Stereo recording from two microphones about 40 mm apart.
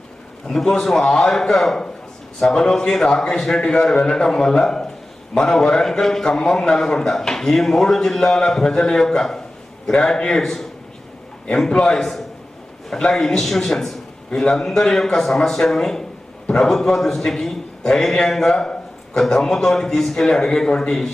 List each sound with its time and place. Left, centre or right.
0.4 s a man's voice: centre